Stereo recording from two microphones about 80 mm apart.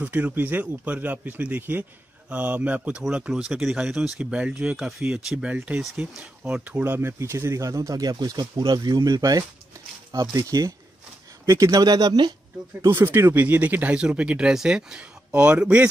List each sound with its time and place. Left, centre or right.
0.0 s speech: right
6.8 s speech: right
11.8 s speech: right
12.9 s speech: right